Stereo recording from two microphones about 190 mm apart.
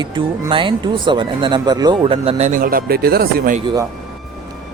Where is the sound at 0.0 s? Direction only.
25° right (ahead or behind).